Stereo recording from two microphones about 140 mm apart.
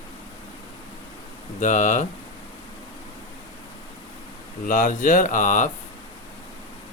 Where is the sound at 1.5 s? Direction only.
60° left (ahead or behind).